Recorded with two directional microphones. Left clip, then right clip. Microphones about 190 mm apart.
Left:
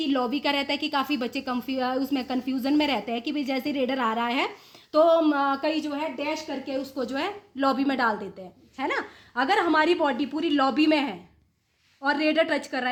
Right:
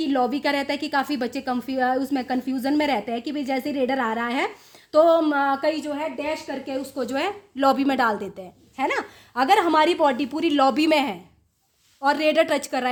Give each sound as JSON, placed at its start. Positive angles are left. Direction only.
{"t": 0.1, "sound": "a woman's voice", "side_deg": -20}